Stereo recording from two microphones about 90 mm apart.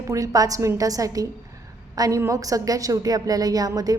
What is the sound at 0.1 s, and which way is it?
A woman's voice, 40° right (ahead or behind).